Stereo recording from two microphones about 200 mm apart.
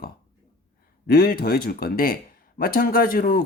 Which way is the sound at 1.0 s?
45° left (ahead or behind).